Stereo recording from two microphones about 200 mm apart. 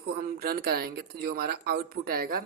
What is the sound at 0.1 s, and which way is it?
Speech, 50° right (ahead or behind).